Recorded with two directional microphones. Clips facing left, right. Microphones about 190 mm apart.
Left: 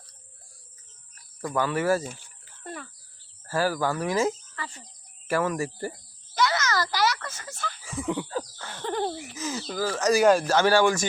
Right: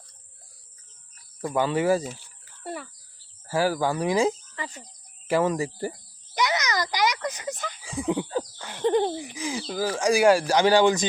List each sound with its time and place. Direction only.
1.4 s a child's voice: 20° right (ahead or behind)